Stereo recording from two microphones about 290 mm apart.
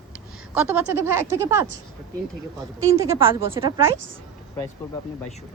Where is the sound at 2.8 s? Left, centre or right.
Centre.